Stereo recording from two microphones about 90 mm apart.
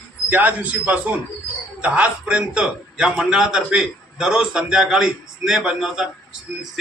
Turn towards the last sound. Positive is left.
turn(degrees=-5)  # may be behind; listen again after turning